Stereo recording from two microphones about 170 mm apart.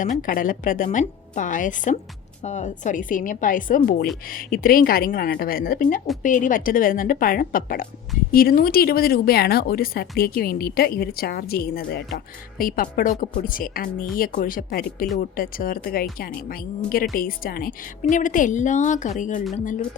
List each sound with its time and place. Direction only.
0.0 s a woman's voice: 50° left (ahead or behind)